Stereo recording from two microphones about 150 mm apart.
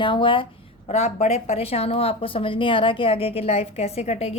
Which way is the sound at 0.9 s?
45° left (ahead or behind).